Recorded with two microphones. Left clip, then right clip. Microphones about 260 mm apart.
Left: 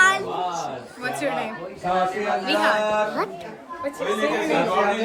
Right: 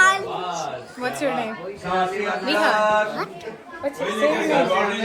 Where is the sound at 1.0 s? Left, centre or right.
Centre.